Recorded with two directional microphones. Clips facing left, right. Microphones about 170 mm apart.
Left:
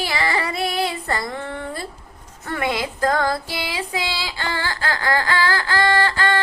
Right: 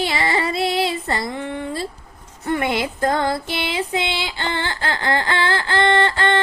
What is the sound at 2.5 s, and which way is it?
Female singing, 25° right (ahead or behind).